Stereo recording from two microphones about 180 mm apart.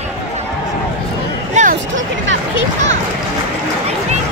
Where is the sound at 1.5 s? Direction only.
45° right (ahead or behind).